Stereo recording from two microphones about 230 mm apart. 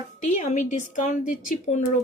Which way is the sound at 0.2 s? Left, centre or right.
Left.